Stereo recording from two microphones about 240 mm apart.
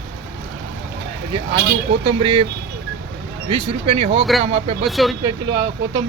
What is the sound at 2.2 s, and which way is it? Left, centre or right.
Speech, right.